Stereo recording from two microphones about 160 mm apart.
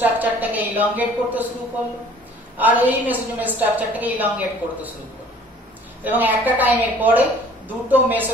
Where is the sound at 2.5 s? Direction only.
10° right (ahead or behind).